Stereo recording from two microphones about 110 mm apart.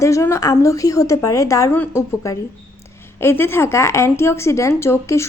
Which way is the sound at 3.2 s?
20° left (ahead or behind).